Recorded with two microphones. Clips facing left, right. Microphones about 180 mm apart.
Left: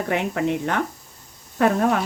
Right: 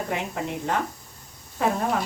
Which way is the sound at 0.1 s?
70° left (ahead or behind).